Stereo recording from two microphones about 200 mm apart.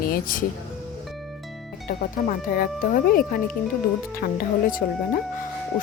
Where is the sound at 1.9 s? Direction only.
45° left (ahead or behind).